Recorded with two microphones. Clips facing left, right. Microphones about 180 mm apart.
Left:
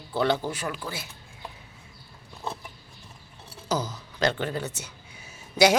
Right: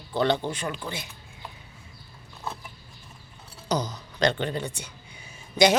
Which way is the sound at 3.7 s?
5° left (ahead or behind).